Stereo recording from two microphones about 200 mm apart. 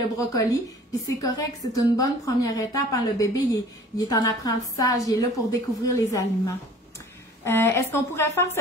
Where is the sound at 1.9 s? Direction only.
15° left (ahead or behind).